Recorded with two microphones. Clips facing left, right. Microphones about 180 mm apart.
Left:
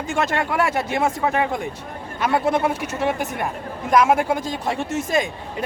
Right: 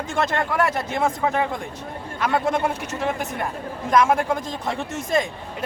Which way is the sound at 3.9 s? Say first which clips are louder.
Left 2 dB; 5° left (ahead or behind).